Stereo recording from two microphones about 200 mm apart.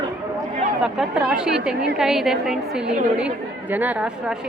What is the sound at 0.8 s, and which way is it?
A woman's voice, 5° right (ahead or behind).